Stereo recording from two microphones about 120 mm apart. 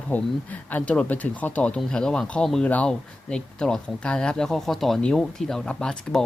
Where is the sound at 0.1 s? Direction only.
15° left (ahead or behind).